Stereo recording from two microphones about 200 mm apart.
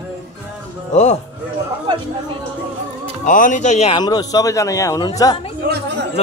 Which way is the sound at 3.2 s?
40° left (ahead or behind).